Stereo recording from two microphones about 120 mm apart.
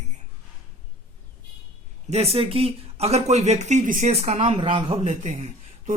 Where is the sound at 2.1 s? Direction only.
60° right (ahead or behind).